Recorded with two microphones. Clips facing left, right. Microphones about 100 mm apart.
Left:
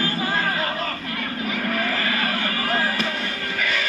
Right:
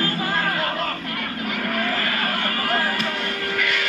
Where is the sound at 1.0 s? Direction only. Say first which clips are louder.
Even; 55° right (ahead or behind).